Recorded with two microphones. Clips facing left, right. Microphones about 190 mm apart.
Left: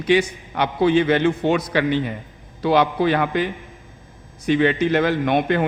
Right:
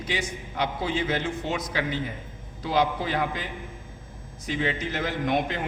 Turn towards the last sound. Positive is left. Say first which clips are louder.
# left 7 dB
turn(degrees=65)  # may be behind; listen again after turning